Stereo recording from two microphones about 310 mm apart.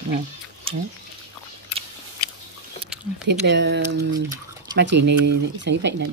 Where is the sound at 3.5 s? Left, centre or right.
Right.